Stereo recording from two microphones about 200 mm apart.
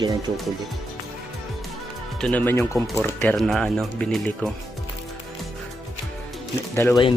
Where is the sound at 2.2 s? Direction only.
5° left (ahead or behind).